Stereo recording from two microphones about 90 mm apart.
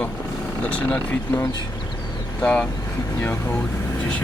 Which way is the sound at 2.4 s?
10° left (ahead or behind).